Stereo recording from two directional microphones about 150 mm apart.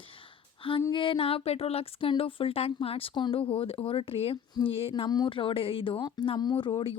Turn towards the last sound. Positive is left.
turn(degrees=30)  # may be behind; listen again after turning